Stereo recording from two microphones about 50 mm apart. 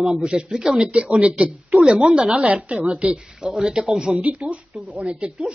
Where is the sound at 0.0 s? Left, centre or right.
Centre.